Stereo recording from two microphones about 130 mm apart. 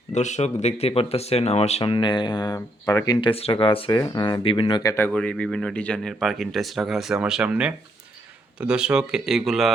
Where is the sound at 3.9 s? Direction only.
30° left (ahead or behind).